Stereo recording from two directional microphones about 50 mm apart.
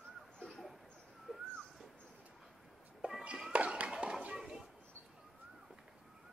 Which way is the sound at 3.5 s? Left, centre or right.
Right.